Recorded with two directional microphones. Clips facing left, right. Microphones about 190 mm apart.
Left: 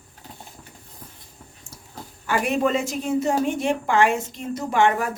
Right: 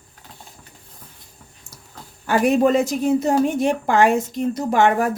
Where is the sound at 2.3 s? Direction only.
40° right (ahead or behind).